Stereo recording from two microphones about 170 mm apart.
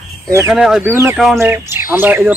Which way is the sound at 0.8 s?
15° right (ahead or behind).